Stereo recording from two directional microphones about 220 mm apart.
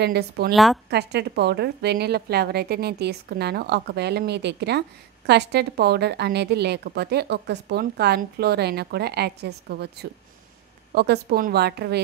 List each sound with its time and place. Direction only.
0.0 s a woman's voice: 50° right (ahead or behind)
0.5 s a woman's voice: centre (ahead or behind)
0.8 s a woman's voice: 50° right (ahead or behind)